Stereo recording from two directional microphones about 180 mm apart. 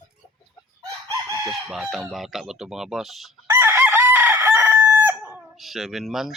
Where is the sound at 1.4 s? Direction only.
Centre (ahead or behind).